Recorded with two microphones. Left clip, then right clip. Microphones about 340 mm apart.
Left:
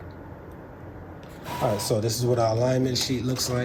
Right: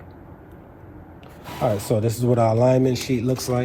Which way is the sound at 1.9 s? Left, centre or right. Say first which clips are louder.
Right 3 dB; right.